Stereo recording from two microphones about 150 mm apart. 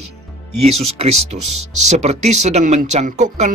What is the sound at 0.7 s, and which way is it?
Speech, 45° right (ahead or behind).